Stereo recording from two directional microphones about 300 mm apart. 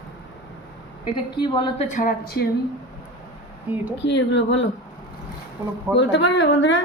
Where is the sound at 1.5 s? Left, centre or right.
Centre.